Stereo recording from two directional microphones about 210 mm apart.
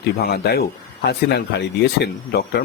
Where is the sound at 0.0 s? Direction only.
50° left (ahead or behind).